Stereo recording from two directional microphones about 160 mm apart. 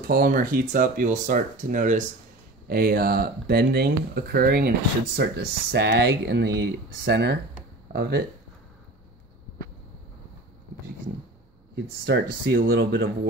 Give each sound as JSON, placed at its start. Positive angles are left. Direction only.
{"t": 0.0, "sound": "speech", "side_deg": -65}
{"t": 2.7, "sound": "speech", "side_deg": -70}
{"t": 7.9, "sound": "speech", "side_deg": -70}
{"t": 11.7, "sound": "speech", "side_deg": -90}